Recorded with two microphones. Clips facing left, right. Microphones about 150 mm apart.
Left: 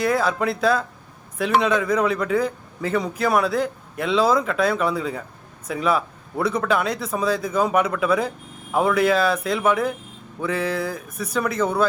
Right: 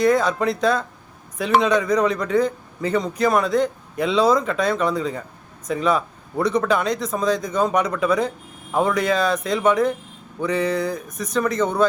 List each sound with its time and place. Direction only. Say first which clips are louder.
0.0 s a man's voice: right 3 dB; 5° left (ahead or behind)